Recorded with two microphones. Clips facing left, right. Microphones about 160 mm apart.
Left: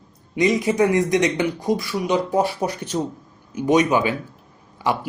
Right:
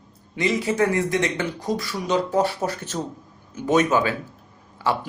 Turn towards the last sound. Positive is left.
turn(degrees=15)  # may be behind; listen again after turning